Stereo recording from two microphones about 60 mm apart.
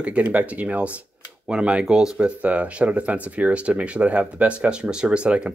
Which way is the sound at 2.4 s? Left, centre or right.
Right.